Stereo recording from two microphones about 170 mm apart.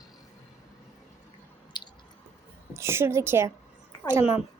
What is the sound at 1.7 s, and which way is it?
Squish, 25° left (ahead or behind).